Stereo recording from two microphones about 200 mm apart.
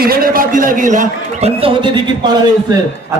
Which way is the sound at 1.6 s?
25° right (ahead or behind).